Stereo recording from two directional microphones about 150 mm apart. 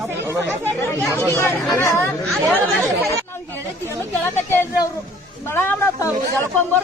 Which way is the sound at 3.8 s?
15° left (ahead or behind).